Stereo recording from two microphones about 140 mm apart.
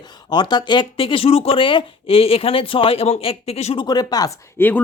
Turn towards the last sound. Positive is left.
turn(degrees=15)  # may be behind; listen again after turning